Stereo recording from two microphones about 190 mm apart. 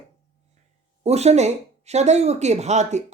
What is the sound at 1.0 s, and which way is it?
Speech, 35° right (ahead or behind).